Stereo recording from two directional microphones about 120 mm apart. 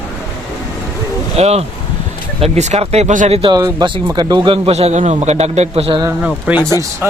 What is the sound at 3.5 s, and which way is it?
Speech, 30° right (ahead or behind).